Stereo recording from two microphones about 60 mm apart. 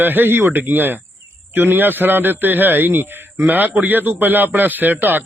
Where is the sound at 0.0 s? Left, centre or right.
Right.